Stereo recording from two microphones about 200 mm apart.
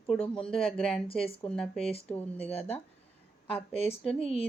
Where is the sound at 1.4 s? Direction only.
5° left (ahead or behind).